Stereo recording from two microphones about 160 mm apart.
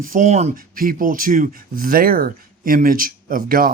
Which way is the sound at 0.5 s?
65° right (ahead or behind).